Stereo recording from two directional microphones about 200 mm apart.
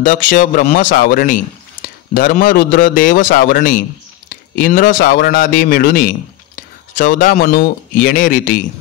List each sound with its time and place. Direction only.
0.0 s a man's voice: 40° left (ahead or behind)